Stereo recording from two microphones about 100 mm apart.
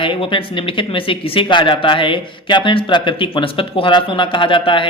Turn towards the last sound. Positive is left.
turn(degrees=60)  # may be behind; listen again after turning